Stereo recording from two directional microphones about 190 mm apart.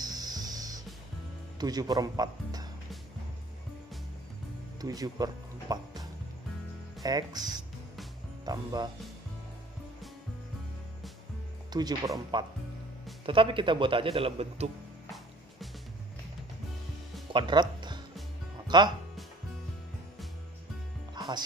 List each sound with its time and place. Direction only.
0.0 s music: 20° right (ahead or behind)
1.6 s speech: 20° right (ahead or behind)
4.8 s speech: 20° right (ahead or behind)
11.7 s speech: 20° right (ahead or behind)
17.3 s music: 25° right (ahead or behind)
18.7 s speech: 25° right (ahead or behind)
21.1 s music: 20° right (ahead or behind)